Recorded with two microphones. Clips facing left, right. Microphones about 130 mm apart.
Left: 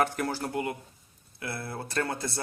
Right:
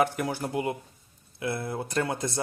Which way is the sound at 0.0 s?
10° right (ahead or behind).